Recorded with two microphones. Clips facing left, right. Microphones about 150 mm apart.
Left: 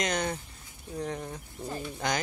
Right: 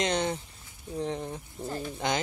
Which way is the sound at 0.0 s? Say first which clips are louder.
Right 2 dB; 25° right (ahead or behind).